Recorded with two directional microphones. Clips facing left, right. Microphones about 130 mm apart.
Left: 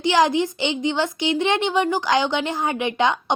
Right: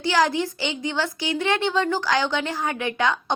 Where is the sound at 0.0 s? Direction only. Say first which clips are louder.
Left 3 dB; 20° left (ahead or behind).